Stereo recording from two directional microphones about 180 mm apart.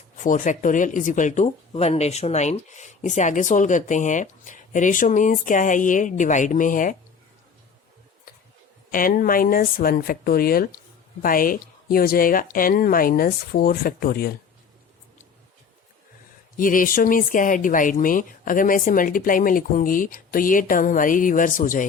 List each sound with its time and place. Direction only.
0.2 s speech: 45° left (ahead or behind)
8.9 s speech: 50° left (ahead or behind)
16.6 s speech: 50° left (ahead or behind)